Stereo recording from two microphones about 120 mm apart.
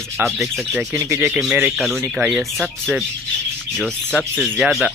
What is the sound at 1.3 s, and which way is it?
Speech, 5° right (ahead or behind).